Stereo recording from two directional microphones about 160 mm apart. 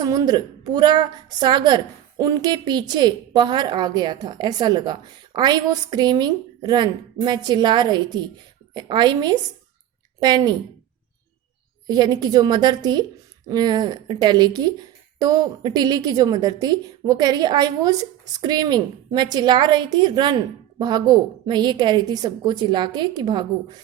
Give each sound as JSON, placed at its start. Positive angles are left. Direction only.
{"t": 0.0, "sound": "a woman's voice", "side_deg": -25}
{"t": 11.9, "sound": "a woman's voice", "side_deg": -25}